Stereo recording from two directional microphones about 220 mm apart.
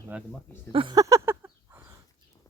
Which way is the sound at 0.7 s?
20° right (ahead or behind).